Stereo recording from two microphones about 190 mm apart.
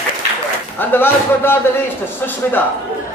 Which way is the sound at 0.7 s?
10° left (ahead or behind).